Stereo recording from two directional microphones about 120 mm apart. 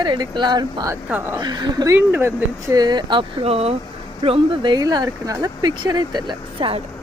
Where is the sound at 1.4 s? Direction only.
35° right (ahead or behind).